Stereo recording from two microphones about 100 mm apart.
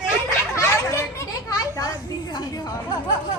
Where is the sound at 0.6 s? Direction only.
30° left (ahead or behind).